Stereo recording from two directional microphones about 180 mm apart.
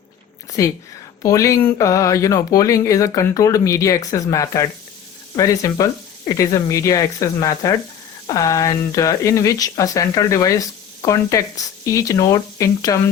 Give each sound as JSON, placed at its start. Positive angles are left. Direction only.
{"t": 0.6, "sound": "speech", "side_deg": 15}